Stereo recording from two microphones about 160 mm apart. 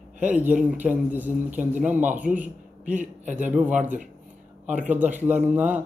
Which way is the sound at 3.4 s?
10° right (ahead or behind).